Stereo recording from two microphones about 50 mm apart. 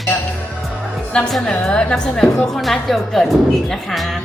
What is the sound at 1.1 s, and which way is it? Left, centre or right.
A woman's voice, centre.